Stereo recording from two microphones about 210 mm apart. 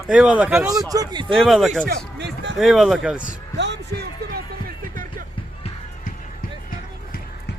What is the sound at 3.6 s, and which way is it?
Music, 55° right (ahead or behind).